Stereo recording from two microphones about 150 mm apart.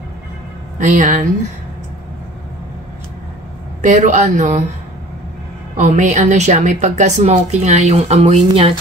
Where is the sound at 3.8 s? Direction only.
55° right (ahead or behind).